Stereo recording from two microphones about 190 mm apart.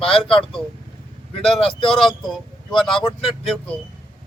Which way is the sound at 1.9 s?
Centre (ahead or behind).